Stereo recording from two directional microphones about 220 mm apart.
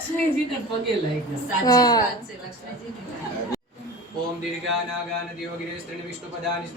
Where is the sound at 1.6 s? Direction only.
15° left (ahead or behind).